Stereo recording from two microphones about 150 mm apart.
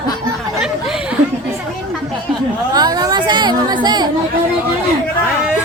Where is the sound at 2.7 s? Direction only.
25° right (ahead or behind).